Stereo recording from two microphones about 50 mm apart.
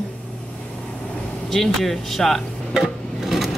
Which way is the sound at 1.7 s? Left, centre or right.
Centre.